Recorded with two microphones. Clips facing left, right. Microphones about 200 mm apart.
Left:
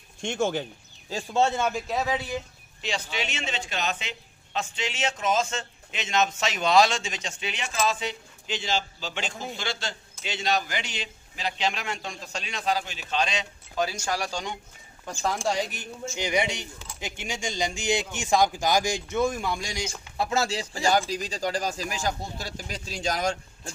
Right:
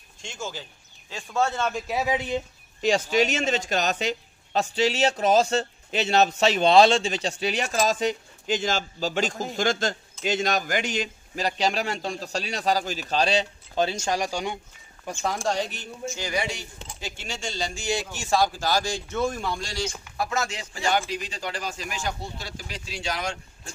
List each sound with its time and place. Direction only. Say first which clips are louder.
0.2 s speech: left 9 dB; 60° left (ahead or behind)
1.1 s speech: left 2 dB; 30° left (ahead or behind)
1.9 s speech: right 2 dB; 10° right (ahead or behind)
2.8 s speech: right 10 dB; 45° right (ahead or behind); by 14.6 s 10° right (ahead or behind)
15.4 s speech: right 1 dB; 10° left (ahead or behind)
20.2 s speech: left 5 dB; 30° left (ahead or behind)